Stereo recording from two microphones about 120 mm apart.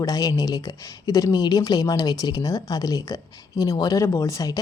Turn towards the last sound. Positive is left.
turn(degrees=30)  # may be behind; listen again after turning